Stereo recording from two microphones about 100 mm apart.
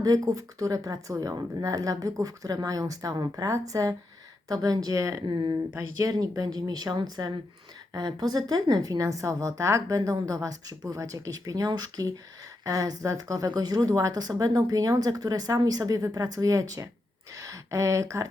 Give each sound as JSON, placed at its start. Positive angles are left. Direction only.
{"t": 0.0, "sound": "a woman's voice", "side_deg": -35}